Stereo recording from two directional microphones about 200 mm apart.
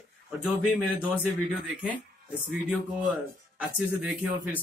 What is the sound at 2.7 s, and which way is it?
Speech, 5° right (ahead or behind).